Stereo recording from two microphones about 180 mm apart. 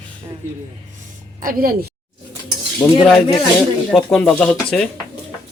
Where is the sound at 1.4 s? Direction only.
50° right (ahead or behind).